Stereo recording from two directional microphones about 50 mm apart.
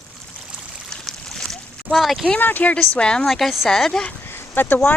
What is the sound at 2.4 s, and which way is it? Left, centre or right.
Speech, left.